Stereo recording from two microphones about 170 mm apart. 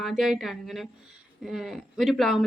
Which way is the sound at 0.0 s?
Centre (ahead or behind).